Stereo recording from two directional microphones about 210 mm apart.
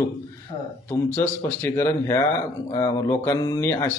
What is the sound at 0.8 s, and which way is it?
Speech, 10° left (ahead or behind).